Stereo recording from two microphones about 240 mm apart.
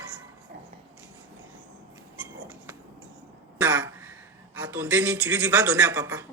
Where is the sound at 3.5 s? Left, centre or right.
Centre.